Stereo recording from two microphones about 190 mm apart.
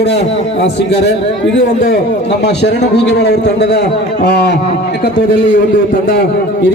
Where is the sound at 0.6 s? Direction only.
65° left (ahead or behind).